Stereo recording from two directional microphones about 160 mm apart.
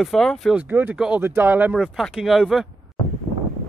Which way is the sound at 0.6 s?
10° right (ahead or behind).